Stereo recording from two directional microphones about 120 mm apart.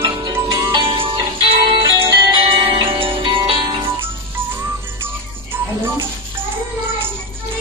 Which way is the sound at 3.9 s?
20° right (ahead or behind).